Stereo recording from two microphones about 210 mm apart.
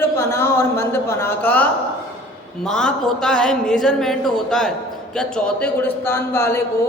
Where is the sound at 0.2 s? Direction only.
10° left (ahead or behind).